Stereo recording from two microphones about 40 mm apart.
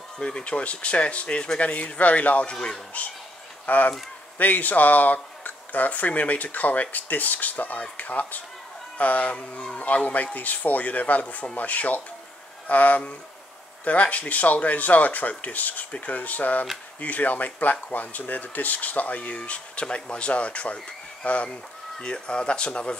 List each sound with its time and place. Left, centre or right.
0.2 s speech: left